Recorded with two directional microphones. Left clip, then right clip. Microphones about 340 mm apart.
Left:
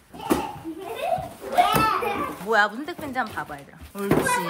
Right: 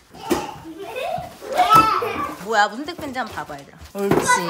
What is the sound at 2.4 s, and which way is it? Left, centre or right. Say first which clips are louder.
Speech: right 2 dB; centre.